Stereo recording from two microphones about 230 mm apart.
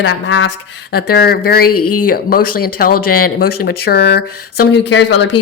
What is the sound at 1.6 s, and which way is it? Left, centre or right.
Speech, left.